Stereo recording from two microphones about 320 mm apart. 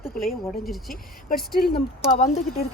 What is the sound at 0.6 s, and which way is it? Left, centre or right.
Speech, centre.